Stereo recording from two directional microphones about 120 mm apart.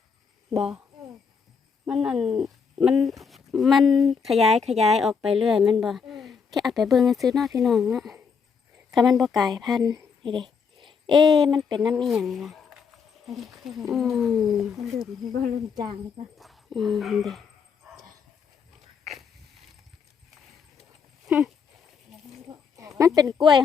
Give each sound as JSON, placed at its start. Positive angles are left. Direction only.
{"t": 1.9, "sound": "a woman's voice", "side_deg": -5}
{"t": 9.8, "sound": "a sound", "side_deg": -35}
{"t": 11.3, "sound": "speech", "side_deg": 0}
{"t": 11.5, "sound": "speech", "side_deg": -35}
{"t": 11.9, "sound": "speech", "side_deg": 0}
{"t": 16.4, "sound": "speech", "side_deg": 0}
{"t": 21.2, "sound": "horse", "side_deg": -5}
{"t": 22.4, "sound": "a sound", "side_deg": -25}
{"t": 23.4, "sound": "speech", "side_deg": 0}